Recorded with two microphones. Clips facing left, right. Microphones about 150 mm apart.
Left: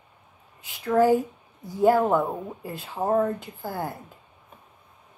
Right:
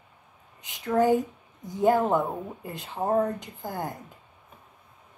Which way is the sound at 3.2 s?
20° right (ahead or behind).